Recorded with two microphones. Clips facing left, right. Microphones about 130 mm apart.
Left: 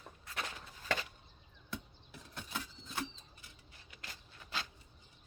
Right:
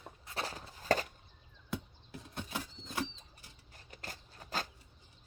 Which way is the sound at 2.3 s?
40° right (ahead or behind).